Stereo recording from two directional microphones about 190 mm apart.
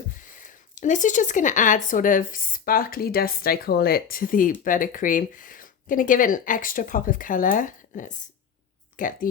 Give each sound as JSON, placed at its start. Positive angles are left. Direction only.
{"t": 0.1, "sound": "speech", "side_deg": 45}